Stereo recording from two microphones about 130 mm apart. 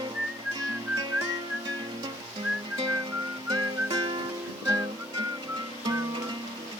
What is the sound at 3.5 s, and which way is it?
Music, 30° right (ahead or behind).